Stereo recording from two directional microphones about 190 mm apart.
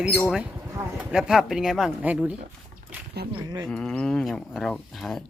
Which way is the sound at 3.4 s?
20° right (ahead or behind).